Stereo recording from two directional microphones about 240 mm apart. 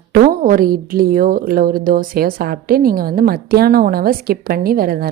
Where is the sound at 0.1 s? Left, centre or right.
Right.